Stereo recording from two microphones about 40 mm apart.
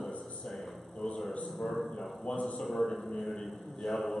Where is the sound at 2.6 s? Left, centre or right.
Centre.